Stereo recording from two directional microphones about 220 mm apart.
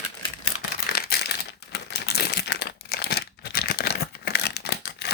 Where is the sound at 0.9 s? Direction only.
45° left (ahead or behind).